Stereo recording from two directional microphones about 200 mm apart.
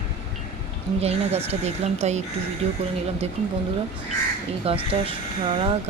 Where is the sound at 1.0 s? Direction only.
30° right (ahead or behind).